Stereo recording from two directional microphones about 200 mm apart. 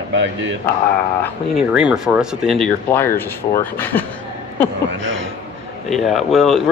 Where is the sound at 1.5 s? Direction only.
5° right (ahead or behind).